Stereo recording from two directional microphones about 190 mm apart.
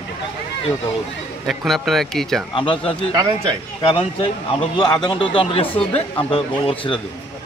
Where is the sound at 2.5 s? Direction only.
25° left (ahead or behind).